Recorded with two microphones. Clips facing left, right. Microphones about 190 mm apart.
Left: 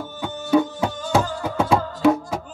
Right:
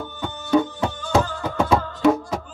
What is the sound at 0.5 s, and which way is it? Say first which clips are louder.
Music: left 1 dB; 5° left (ahead or behind).